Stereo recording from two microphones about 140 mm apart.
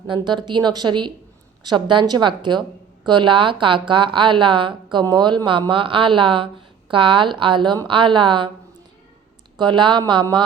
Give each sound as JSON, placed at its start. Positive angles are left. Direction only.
{"t": 0.1, "sound": "a woman's voice", "side_deg": -35}
{"t": 9.6, "sound": "a woman's voice", "side_deg": -35}